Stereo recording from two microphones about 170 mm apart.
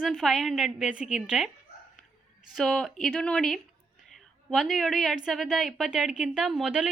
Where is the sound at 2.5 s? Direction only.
Centre (ahead or behind).